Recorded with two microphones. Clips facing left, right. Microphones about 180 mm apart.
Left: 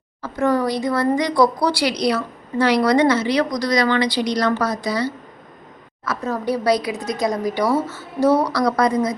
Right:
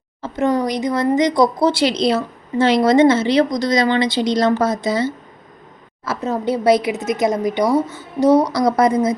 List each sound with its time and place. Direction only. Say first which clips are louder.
0.2 s speech: right 1 dB; 20° right (ahead or behind)